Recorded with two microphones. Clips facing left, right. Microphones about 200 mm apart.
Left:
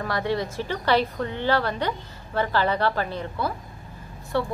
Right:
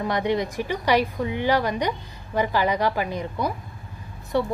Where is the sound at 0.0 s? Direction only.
20° right (ahead or behind).